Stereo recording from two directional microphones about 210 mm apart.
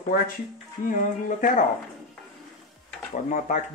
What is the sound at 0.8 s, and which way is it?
Speech, 40° left (ahead or behind).